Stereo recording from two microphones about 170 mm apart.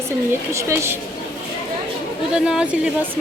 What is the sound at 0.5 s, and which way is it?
Speech, 15° right (ahead or behind).